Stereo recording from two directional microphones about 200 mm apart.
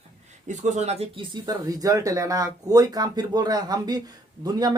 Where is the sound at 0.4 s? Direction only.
35° right (ahead or behind).